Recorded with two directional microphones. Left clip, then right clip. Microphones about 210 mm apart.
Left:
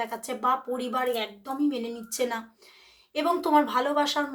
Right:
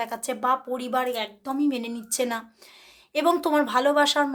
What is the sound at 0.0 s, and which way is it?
Speech, 45° right (ahead or behind).